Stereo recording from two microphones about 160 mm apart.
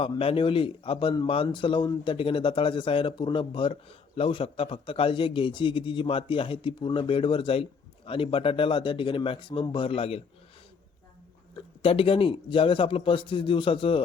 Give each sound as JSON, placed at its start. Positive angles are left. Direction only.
{"t": 0.0, "sound": "speech", "side_deg": 35}
{"t": 11.8, "sound": "speech", "side_deg": 35}